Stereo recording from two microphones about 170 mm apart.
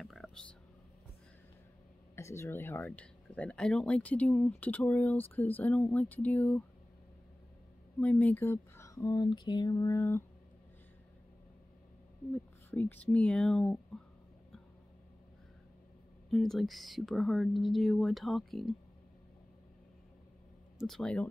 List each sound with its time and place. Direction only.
0.0 s a sound: centre (ahead or behind)
2.1 s speech: 15° left (ahead or behind)
8.0 s speech: 10° left (ahead or behind)
12.7 s speech: 10° left (ahead or behind)
16.3 s speech: centre (ahead or behind)
20.8 s speech: 5° left (ahead or behind)